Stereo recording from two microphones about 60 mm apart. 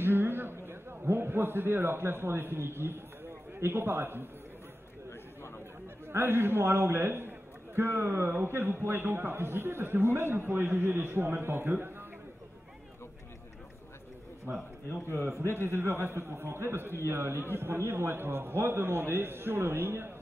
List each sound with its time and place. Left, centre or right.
0.0 s a sound: right
3.5 s a man's voice: right
6.0 s a man's voice: right
15.3 s a man's voice: left
15.6 s a man's voice: right